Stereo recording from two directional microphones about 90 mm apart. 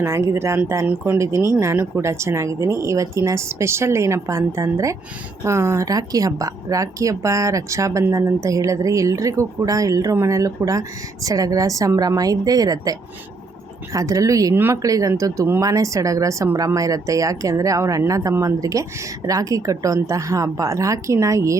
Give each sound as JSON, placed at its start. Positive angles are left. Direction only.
{"t": 0.0, "sound": "speech", "side_deg": -30}
{"t": 14.5, "sound": "speech", "side_deg": -25}
{"t": 14.8, "sound": "speech", "side_deg": -40}